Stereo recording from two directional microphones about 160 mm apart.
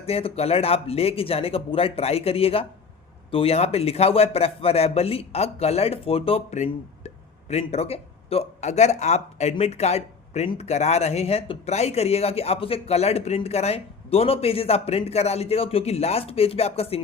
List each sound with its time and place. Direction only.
0.0 s speech: 40° left (ahead or behind)